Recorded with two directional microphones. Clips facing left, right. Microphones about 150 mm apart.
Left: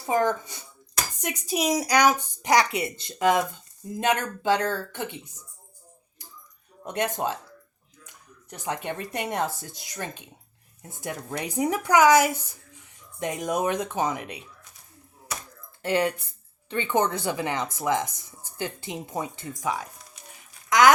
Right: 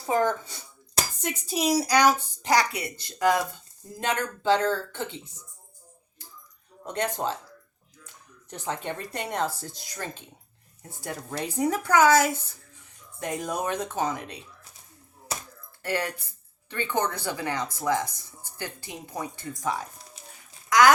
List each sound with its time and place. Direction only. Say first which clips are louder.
0.0 s a woman's voice: left 1 dB; 15° left (ahead or behind)
6.8 s a woman's voice: left 1 dB; 15° left (ahead or behind)
15.3 s a sound: right 1 dB; 30° right (ahead or behind)
15.8 s speech: left 5 dB; 20° left (ahead or behind)
19.8 s a sound: right 1 dB; 30° right (ahead or behind)
20.7 s speech: left 1 dB; 20° left (ahead or behind)